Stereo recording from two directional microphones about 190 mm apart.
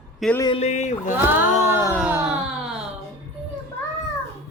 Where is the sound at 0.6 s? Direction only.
40° left (ahead or behind).